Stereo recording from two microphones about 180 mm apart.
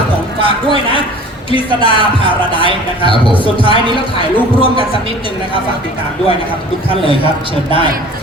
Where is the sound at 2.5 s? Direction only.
30° left (ahead or behind).